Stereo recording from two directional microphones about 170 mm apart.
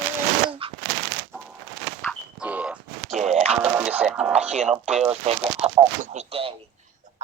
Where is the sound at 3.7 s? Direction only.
10° right (ahead or behind).